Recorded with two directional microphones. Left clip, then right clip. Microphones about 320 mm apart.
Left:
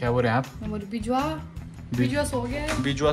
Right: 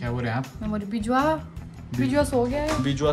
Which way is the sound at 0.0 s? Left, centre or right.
Centre.